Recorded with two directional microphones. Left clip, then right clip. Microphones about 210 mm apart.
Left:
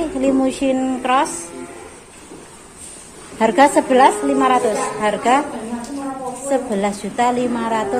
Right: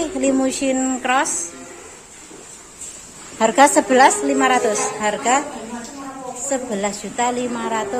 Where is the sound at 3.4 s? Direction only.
10° right (ahead or behind).